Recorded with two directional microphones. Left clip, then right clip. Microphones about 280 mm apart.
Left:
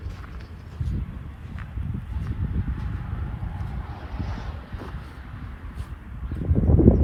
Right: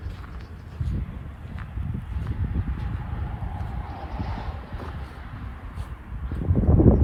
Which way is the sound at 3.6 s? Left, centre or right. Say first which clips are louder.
Right 3 dB; right.